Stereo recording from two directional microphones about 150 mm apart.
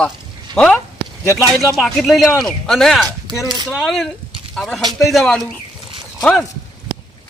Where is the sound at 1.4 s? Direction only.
20° right (ahead or behind).